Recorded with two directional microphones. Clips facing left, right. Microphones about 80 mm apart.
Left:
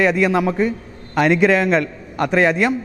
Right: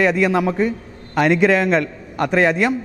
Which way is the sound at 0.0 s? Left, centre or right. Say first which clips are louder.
Even; centre.